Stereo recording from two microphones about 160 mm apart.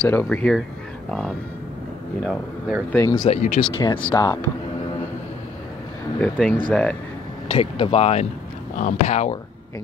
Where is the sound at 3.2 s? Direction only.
45° left (ahead or behind).